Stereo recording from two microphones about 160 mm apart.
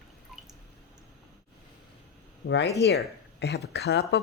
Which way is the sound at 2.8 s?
90° left.